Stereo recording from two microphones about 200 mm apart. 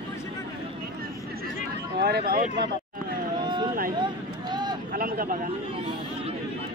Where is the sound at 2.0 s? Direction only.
50° right (ahead or behind).